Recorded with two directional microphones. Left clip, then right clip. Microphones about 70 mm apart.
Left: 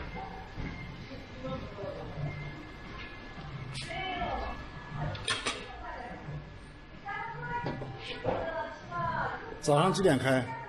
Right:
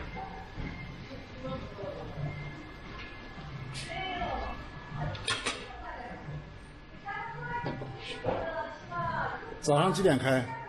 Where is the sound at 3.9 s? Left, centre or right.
Right.